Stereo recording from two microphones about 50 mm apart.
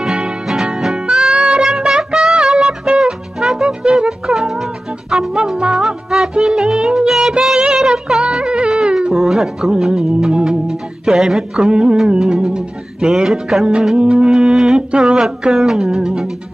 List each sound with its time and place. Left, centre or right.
0.0 s music: centre
1.3 s music: right